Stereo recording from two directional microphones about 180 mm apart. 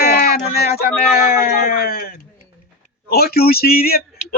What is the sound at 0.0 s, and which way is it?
Speech, 55° left (ahead or behind).